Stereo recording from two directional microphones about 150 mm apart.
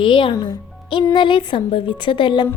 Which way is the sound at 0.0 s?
35° left (ahead or behind).